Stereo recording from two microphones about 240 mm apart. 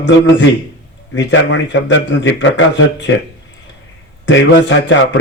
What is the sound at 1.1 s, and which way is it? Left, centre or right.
A man's voice, left.